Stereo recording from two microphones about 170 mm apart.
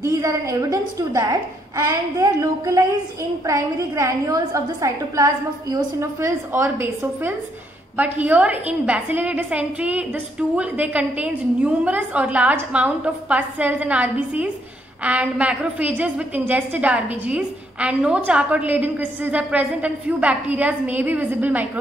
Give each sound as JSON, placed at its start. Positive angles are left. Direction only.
{"t": 0.0, "sound": "a woman's voice", "side_deg": -20}